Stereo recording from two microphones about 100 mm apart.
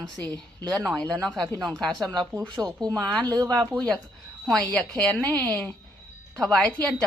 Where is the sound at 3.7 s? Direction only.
5° left (ahead or behind).